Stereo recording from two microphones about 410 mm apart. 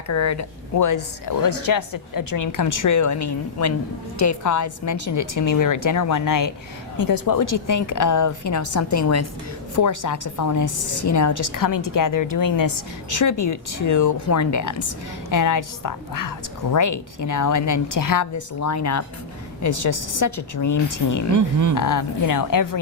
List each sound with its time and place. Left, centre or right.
0.1 s speech: left
21.3 s speech: right
21.8 s speech: left